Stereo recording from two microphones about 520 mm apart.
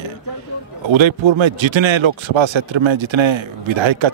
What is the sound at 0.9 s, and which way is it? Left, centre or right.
Speech, right.